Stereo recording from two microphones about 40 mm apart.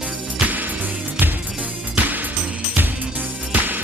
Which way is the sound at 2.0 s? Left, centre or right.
Right.